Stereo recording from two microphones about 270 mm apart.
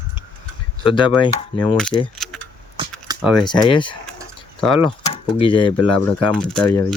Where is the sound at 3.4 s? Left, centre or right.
Centre.